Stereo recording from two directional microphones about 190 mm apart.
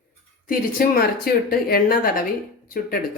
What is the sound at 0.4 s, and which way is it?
Speech, 50° left (ahead or behind).